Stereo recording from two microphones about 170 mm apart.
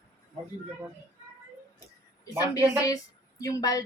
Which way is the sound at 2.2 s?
20° left (ahead or behind).